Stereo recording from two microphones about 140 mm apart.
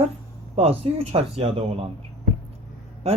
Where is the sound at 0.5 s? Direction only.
45° right (ahead or behind).